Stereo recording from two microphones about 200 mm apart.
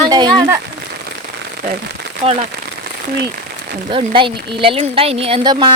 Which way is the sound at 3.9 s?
25° right (ahead or behind).